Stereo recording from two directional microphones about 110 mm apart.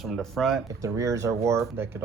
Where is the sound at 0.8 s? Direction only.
30° right (ahead or behind).